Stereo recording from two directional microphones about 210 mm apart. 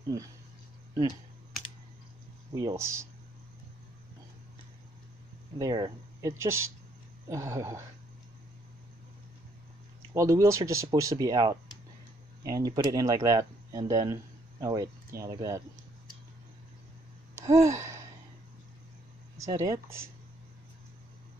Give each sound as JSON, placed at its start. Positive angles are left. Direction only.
{"t": 2.5, "sound": "speech", "side_deg": -15}
{"t": 5.6, "sound": "speech", "side_deg": -15}
{"t": 10.1, "sound": "speech", "side_deg": -15}
{"t": 17.5, "sound": "gasp", "side_deg": -15}
{"t": 19.3, "sound": "speech", "side_deg": -15}